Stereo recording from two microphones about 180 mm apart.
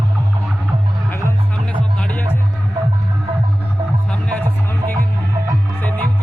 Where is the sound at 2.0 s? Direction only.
10° left (ahead or behind).